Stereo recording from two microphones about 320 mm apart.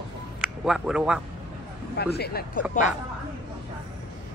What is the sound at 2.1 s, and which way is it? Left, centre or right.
Speech, left.